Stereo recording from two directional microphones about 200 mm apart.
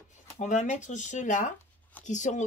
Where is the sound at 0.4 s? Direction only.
35° left (ahead or behind).